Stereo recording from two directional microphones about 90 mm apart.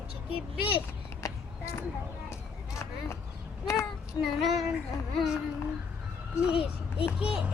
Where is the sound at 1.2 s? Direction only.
35° left (ahead or behind).